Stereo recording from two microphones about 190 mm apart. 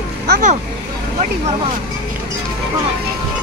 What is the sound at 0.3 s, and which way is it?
Speech, 40° right (ahead or behind).